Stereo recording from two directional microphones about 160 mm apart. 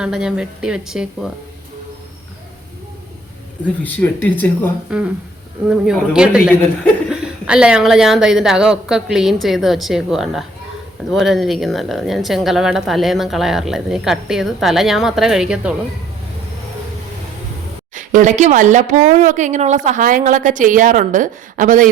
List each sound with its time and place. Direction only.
0.0 s a woman's voice: 5° right (ahead or behind)
3.8 s speech: 10° left (ahead or behind)
4.9 s a woman's voice: 5° right (ahead or behind)
17.9 s speech: 50° right (ahead or behind)